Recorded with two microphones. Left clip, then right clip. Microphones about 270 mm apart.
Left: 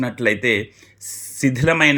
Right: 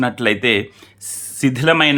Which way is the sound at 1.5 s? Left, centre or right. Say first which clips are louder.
Right 2 dB; centre.